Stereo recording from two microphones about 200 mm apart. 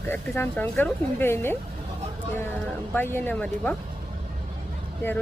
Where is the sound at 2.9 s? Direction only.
10° left (ahead or behind).